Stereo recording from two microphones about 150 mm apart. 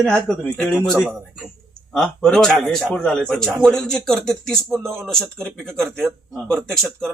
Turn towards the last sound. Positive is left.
turn(degrees=5)  # may be behind; listen again after turning